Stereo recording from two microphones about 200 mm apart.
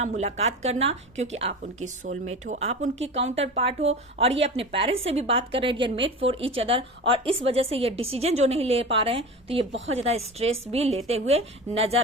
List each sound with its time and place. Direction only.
0.0 s a woman's voice: 35° right (ahead or behind)